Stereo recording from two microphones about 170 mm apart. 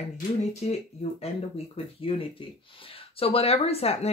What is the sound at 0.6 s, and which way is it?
Speech, 40° left (ahead or behind).